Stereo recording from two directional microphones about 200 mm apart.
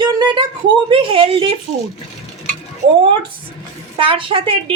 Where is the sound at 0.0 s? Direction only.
25° right (ahead or behind).